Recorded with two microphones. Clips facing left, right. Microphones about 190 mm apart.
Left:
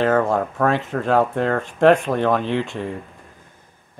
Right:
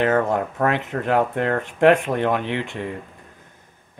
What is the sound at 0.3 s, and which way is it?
Speech, 20° right (ahead or behind).